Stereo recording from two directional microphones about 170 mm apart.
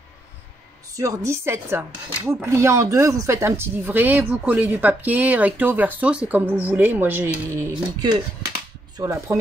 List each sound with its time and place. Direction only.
0.9 s speech: 20° right (ahead or behind)